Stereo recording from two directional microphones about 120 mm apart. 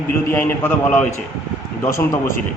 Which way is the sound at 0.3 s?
15° left (ahead or behind).